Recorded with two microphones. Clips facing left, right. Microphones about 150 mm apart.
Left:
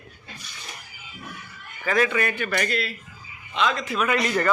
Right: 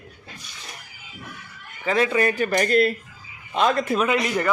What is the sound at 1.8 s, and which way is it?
Speech, 25° right (ahead or behind).